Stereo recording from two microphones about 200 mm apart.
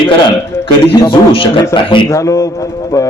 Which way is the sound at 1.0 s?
25° left (ahead or behind).